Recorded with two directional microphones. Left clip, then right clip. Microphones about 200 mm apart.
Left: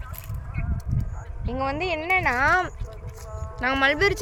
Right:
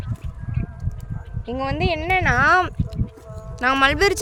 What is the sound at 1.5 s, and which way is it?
Speech, 50° right (ahead or behind).